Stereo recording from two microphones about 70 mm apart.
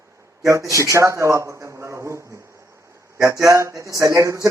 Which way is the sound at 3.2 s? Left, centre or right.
Right.